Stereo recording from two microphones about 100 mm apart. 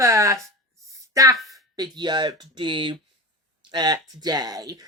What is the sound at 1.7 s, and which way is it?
Speech, 45° right (ahead or behind).